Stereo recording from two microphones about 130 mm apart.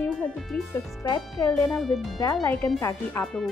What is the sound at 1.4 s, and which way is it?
Speech, 20° left (ahead or behind).